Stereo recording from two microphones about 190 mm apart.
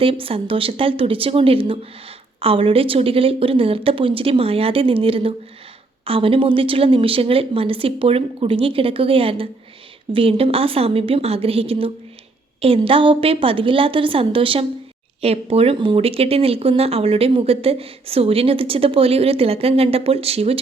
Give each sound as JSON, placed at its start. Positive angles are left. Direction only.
{"t": 0.0, "sound": "a woman's voice", "side_deg": -30}